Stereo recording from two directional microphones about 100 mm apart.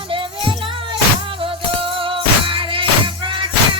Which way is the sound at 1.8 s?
60° right (ahead or behind).